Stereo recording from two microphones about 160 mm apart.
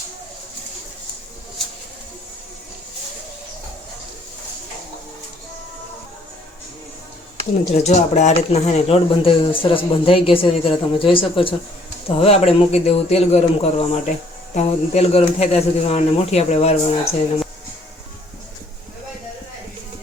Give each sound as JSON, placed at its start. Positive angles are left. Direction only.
{"t": 7.9, "sound": "speech", "side_deg": 45}